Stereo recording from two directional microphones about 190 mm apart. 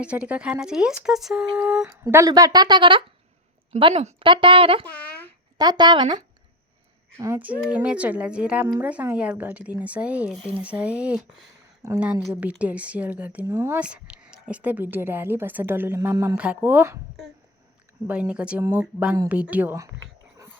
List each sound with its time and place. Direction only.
0.0 s a woman's voice: 5° right (ahead or behind); by 4.9 s 30° right (ahead or behind)
4.9 s a sound: 5° left (ahead or behind)
5.5 s a woman's voice: 20° right (ahead or behind)
7.2 s speech: 10° right (ahead or behind)
18.1 s speech: 5° right (ahead or behind)